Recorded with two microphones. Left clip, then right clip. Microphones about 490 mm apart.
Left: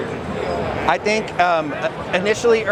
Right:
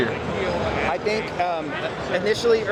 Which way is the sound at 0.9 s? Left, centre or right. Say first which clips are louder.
Left 5 dB; left.